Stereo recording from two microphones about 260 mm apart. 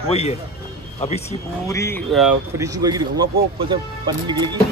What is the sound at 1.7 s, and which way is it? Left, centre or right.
Speech, centre.